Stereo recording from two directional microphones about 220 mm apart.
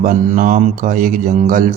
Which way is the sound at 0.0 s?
40° right (ahead or behind).